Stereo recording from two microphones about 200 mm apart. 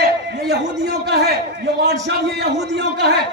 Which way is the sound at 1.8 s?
60° right (ahead or behind).